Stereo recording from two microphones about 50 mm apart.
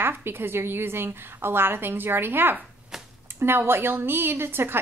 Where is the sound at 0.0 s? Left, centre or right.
Right.